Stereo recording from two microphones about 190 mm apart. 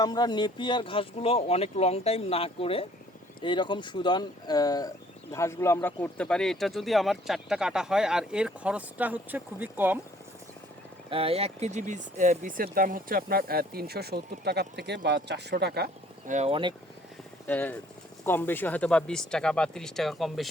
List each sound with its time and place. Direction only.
0.0 s speech: 20° left (ahead or behind); by 10.0 s 10° right (ahead or behind)
11.1 s speech: 30° right (ahead or behind); by 15.9 s 55° right (ahead or behind)
16.2 s speech: 40° right (ahead or behind)
17.4 s speech: 10° left (ahead or behind)